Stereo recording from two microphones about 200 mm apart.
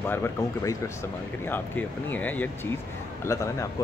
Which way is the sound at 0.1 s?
10° left (ahead or behind).